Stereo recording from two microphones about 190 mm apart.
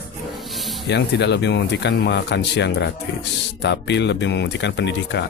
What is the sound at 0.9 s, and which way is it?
Speech, 65° left (ahead or behind).